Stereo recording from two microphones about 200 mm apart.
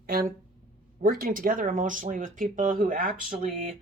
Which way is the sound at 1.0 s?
45° right (ahead or behind).